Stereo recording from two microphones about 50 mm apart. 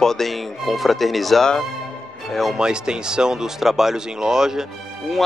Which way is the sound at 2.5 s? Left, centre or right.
Centre.